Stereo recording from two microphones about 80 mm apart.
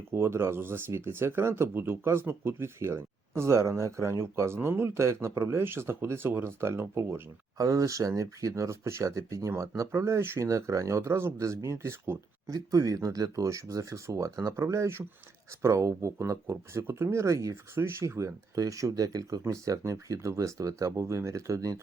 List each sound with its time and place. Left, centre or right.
0.1 s speech: right
10.5 s speech: right
12.5 s speech: right
18.5 s speech: right